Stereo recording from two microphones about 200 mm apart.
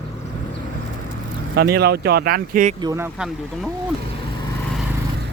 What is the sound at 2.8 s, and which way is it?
Speech, 15° right (ahead or behind).